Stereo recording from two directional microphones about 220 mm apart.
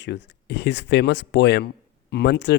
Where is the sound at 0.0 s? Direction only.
50° left (ahead or behind).